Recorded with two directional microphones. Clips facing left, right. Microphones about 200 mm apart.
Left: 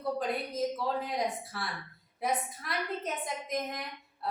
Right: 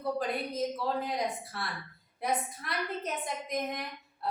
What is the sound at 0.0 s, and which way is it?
A woman's voice, centre (ahead or behind).